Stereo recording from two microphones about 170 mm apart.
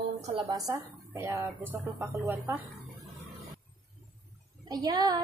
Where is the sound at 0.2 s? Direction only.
35° right (ahead or behind).